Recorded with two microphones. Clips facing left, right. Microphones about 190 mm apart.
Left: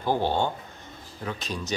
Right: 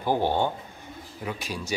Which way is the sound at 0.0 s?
15° right (ahead or behind).